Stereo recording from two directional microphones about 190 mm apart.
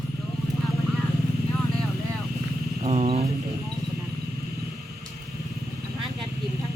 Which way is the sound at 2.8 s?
30° right (ahead or behind).